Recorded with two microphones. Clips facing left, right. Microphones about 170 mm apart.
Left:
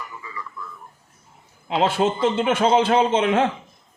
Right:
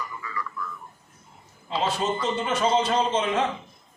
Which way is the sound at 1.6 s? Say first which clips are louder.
Left 6 dB; 60° left (ahead or behind).